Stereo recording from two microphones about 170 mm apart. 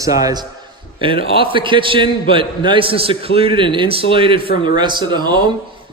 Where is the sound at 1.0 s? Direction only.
30° right (ahead or behind).